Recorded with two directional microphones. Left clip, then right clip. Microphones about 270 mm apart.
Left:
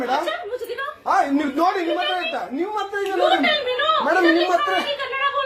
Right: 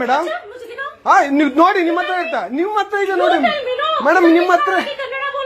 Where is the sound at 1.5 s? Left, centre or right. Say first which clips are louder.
Right 7 dB; right.